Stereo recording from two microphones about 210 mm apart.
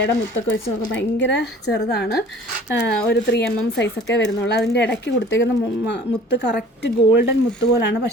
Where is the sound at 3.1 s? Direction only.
55° left (ahead or behind).